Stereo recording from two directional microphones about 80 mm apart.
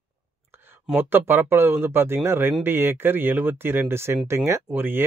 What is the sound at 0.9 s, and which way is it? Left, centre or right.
Speech, right.